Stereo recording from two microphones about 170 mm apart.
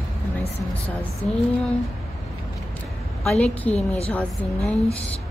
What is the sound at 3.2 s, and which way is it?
A woman's voice, 5° left (ahead or behind).